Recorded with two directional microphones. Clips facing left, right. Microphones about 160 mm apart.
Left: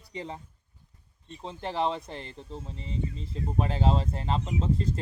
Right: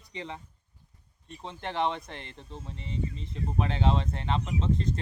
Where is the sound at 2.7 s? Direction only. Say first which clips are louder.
Even; 35° left (ahead or behind).